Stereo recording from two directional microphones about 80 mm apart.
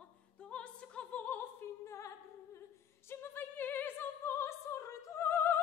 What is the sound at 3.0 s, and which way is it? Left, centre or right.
Opera, left.